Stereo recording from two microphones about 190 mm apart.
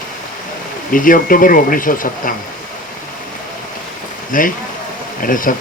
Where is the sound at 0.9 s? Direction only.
45° left (ahead or behind).